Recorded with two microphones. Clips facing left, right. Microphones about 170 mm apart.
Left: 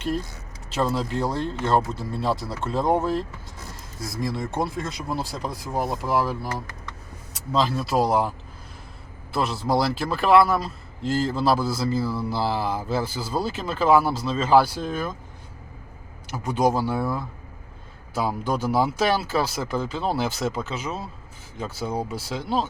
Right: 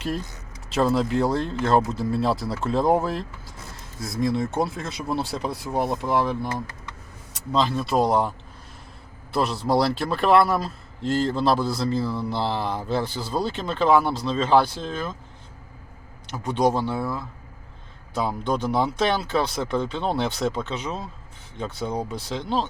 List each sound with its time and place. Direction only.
0.7 s a man's voice: centre (ahead or behind)
9.3 s a man's voice: centre (ahead or behind)
16.2 s a man's voice: 5° left (ahead or behind)